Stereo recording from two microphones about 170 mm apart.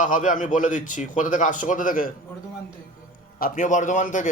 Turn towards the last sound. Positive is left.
turn(degrees=50)  # may be behind; listen again after turning